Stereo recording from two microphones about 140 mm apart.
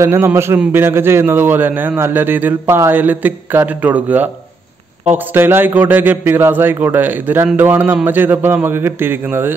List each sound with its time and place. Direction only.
0.0 s a man's voice: 15° right (ahead or behind)